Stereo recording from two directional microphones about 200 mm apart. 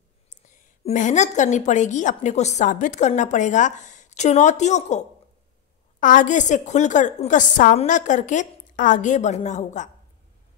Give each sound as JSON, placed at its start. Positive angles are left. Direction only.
{"t": 0.3, "sound": "a woman's voice", "side_deg": 40}